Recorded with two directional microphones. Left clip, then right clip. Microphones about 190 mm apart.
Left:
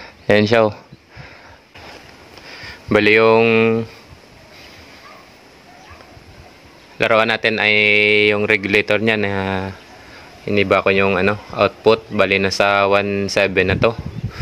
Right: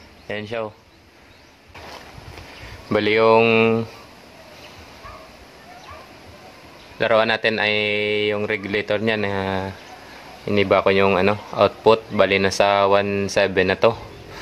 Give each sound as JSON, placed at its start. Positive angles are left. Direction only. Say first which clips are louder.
{"t": 0.3, "sound": "speech", "louder": "left 14 dB", "side_deg": 60}
{"t": 2.9, "sound": "speech", "louder": "left 4 dB", "side_deg": 30}
{"t": 7.0, "sound": "a man's voice", "louder": "left 3 dB", "side_deg": 25}
{"t": 10.4, "sound": "speech", "louder": "left 2 dB", "side_deg": 20}